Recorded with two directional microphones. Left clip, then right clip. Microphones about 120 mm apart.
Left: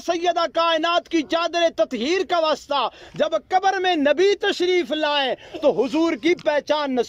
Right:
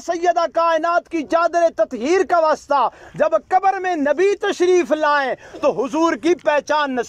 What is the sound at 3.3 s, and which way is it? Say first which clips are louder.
A man's voice: right 3 dB; centre (ahead or behind).